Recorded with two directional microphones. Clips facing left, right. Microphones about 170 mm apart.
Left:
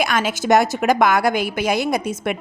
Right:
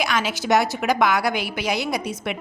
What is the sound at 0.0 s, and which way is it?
A woman's voice, 50° left (ahead or behind).